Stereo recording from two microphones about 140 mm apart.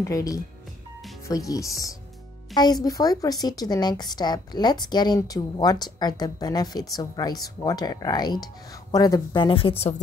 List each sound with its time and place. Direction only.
0.0 s a woman's voice: 25° left (ahead or behind); by 9.9 s 45° left (ahead or behind)